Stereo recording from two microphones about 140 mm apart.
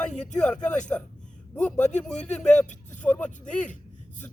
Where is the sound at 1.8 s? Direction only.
55° left (ahead or behind).